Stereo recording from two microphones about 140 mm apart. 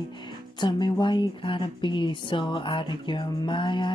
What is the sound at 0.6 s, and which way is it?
Speech, 35° left (ahead or behind).